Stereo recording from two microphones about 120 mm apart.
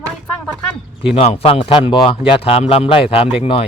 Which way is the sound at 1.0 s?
55° left (ahead or behind).